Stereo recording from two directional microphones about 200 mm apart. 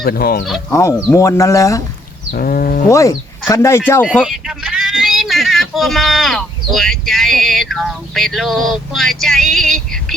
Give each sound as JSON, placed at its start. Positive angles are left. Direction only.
{"t": 0.0, "sound": "speech", "side_deg": 50}
{"t": 0.7, "sound": "speech", "side_deg": 15}
{"t": 2.3, "sound": "speech", "side_deg": 45}
{"t": 2.9, "sound": "speech", "side_deg": 15}
{"t": 4.0, "sound": "speech", "side_deg": -5}